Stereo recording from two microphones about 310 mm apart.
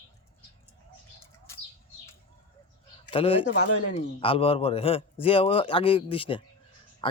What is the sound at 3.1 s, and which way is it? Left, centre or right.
A man's voice, centre.